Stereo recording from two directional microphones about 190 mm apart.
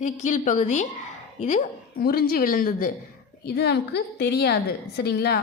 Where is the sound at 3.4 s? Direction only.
60° left (ahead or behind).